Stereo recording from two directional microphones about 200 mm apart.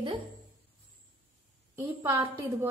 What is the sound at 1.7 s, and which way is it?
Speech, 10° right (ahead or behind).